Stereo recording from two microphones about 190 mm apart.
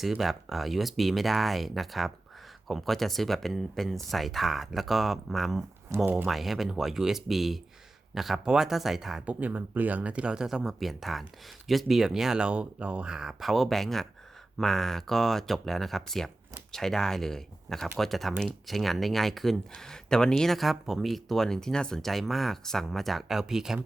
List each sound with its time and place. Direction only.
0.0 s speech: centre (ahead or behind)